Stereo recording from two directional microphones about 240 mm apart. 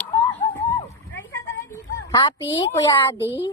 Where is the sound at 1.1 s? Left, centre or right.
Centre.